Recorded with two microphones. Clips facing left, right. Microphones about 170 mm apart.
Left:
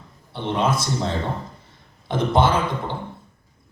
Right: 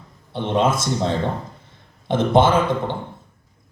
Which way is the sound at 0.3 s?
50° right (ahead or behind).